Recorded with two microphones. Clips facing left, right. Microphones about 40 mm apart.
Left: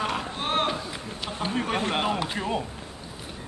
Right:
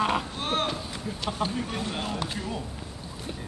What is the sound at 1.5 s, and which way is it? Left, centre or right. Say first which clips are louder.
Speech: left 5 dB; left.